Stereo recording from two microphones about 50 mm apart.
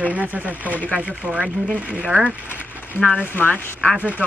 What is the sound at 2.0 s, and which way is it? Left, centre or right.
Speech, right.